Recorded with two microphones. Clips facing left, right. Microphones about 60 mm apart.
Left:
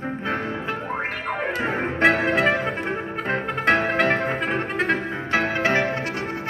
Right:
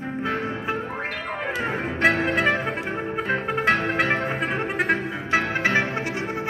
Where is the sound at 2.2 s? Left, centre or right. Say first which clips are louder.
Left 1 dB; centre.